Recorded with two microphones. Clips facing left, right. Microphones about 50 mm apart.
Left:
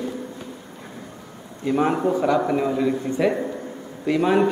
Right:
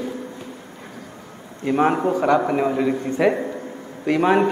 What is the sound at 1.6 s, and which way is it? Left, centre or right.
A man's voice, right.